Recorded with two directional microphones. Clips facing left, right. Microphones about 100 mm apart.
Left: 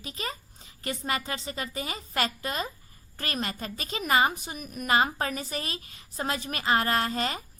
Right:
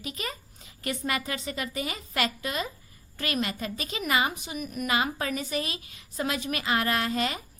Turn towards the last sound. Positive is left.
turn(degrees=35)  # may be behind; listen again after turning